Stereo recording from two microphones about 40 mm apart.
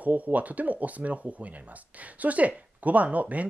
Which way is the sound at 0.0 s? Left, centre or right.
Right.